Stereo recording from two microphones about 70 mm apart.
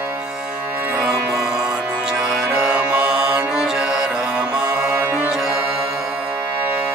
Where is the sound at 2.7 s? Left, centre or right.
Centre.